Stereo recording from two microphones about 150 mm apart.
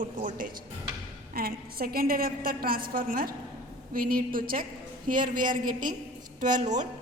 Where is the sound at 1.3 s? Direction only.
85° right.